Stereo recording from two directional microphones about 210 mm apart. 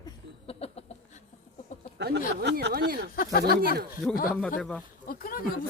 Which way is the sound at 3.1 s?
45° left (ahead or behind).